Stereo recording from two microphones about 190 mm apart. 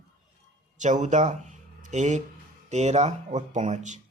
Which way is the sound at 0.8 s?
40° right (ahead or behind).